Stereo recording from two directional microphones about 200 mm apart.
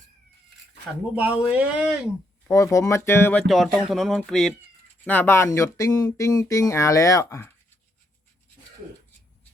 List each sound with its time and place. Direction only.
1.1 s speech: 5° right (ahead or behind)
2.5 s speech: 15° left (ahead or behind)